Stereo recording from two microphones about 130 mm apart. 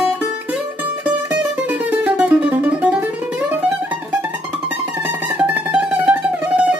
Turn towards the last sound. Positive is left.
turn(degrees=-10)  # may be behind; listen again after turning